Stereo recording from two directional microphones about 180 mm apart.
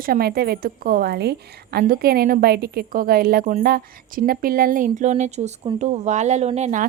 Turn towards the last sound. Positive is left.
turn(degrees=-40)  # may be behind; listen again after turning